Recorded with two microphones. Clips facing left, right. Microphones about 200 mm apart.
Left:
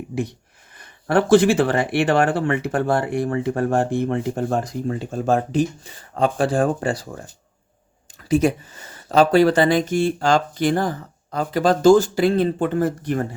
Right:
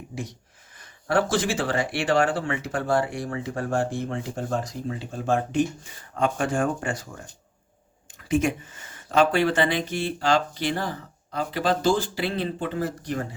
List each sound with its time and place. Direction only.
0.1 s speech: 60° left (ahead or behind); by 7.1 s 35° left (ahead or behind)
8.3 s speech: 35° left (ahead or behind); by 13.2 s 55° left (ahead or behind)